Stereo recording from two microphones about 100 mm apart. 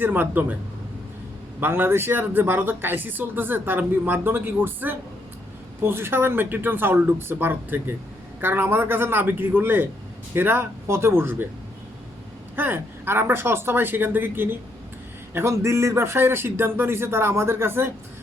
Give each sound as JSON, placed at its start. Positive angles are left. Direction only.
{"t": 0.0, "sound": "speech", "side_deg": -20}
{"t": 1.6, "sound": "speech", "side_deg": -20}
{"t": 12.5, "sound": "speech", "side_deg": -20}